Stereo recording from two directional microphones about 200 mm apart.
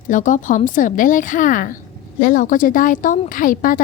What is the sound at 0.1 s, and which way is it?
A woman's voice, 40° left (ahead or behind).